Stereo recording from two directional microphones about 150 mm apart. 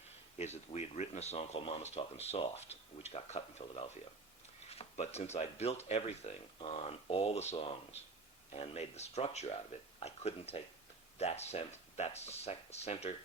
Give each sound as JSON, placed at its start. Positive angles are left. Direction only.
{"t": 0.3, "sound": "speech", "side_deg": 45}